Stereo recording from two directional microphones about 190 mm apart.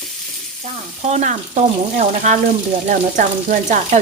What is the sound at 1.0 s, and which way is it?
Speech, 40° right (ahead or behind).